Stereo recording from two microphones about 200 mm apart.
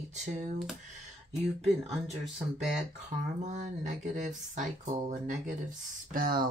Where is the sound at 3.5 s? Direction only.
40° right (ahead or behind).